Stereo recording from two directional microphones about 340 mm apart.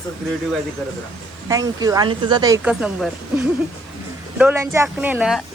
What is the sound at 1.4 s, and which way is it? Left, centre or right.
A woman's voice, centre.